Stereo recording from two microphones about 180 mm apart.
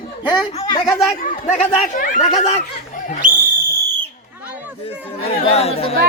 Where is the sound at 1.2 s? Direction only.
45° left (ahead or behind).